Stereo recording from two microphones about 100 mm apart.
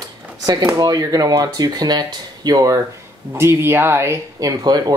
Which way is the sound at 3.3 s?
25° right (ahead or behind).